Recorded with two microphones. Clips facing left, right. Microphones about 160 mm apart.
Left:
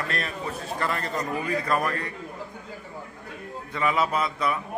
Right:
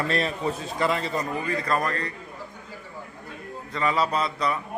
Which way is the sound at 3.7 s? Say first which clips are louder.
Even; 5° left (ahead or behind).